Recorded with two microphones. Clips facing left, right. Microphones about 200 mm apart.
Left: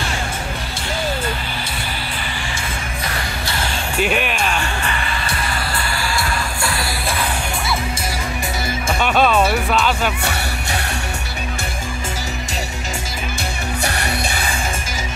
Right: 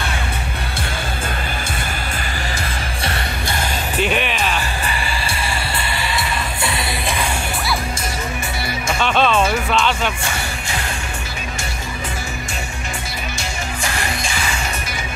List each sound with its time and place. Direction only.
4.0 s speech: 5° left (ahead or behind)
6.6 s music: 20° right (ahead or behind)
9.0 s music: 10° left (ahead or behind)